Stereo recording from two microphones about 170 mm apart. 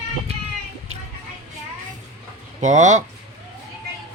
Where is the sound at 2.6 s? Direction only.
45° right (ahead or behind).